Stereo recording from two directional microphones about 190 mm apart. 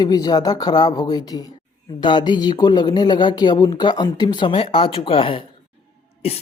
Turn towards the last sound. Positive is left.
turn(degrees=30)  # may be behind; listen again after turning